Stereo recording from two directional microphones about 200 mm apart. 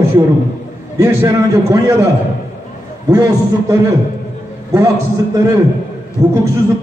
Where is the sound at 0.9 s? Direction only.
15° right (ahead or behind).